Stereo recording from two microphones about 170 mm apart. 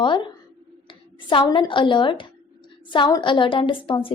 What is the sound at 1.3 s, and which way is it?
A woman's voice, 30° left (ahead or behind).